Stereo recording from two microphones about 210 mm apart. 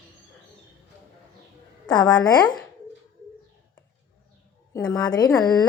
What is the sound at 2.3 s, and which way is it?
Speech, 20° left (ahead or behind).